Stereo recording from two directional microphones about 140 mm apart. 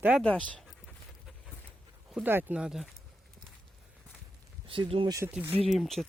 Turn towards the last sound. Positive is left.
turn(degrees=0)  # may be behind; listen again after turning